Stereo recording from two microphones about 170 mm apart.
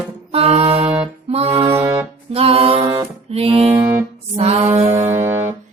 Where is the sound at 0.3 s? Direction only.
35° right (ahead or behind).